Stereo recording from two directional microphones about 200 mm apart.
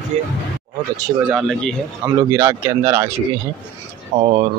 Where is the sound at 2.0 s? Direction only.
15° right (ahead or behind).